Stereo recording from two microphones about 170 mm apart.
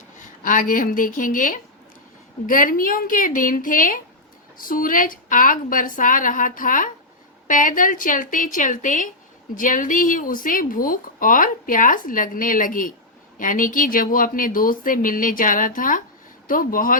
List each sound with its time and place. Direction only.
0.2 s speech: 50° left (ahead or behind)